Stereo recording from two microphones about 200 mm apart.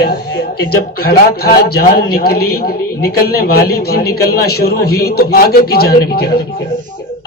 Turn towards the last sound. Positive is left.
turn(degrees=50)  # may be behind; listen again after turning